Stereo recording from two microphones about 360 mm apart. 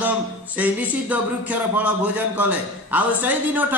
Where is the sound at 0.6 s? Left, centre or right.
Centre.